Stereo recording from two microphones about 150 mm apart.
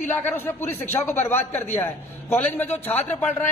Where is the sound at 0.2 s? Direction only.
15° left (ahead or behind).